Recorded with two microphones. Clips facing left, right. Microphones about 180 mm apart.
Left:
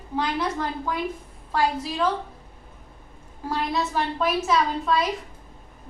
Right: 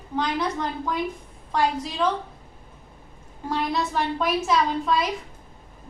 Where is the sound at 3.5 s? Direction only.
5° left (ahead or behind).